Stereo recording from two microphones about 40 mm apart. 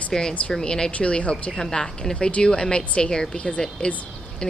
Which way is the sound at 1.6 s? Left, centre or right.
Centre.